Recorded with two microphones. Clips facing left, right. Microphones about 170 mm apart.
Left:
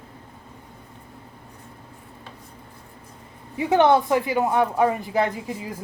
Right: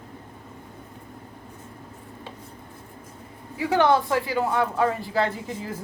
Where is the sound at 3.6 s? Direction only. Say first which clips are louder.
Left 3 dB; 20° left (ahead or behind).